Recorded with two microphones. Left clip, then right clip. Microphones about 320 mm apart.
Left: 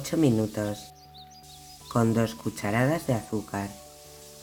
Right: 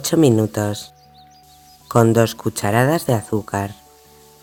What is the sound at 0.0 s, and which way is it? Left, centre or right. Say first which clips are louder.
Speech: right 10 dB; right.